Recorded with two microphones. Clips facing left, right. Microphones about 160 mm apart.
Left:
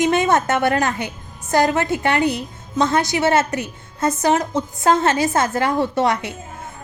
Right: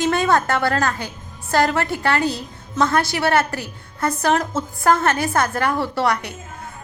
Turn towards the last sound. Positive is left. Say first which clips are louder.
# left 2 dB
turn(degrees=20)  # may be behind; listen again after turning